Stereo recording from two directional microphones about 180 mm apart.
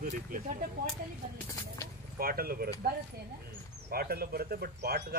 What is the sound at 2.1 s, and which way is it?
Speech, 55° right (ahead or behind).